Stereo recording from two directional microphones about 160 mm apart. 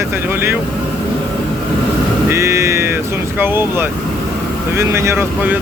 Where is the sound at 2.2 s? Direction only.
15° right (ahead or behind).